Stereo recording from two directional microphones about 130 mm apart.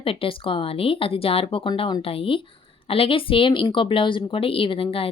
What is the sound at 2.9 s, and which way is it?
Speech, 45° left (ahead or behind).